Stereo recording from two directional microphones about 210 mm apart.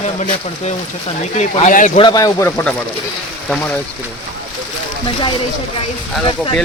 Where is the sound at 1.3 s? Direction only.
35° left (ahead or behind).